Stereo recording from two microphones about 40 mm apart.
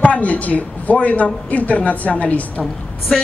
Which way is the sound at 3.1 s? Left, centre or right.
Centre.